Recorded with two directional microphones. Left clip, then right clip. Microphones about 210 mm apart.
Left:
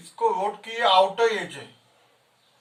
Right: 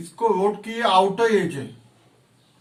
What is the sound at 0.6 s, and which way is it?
Speech, 20° left (ahead or behind).